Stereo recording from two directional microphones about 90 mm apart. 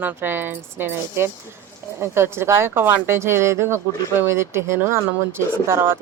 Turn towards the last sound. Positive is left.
turn(degrees=-25)  # may be behind; listen again after turning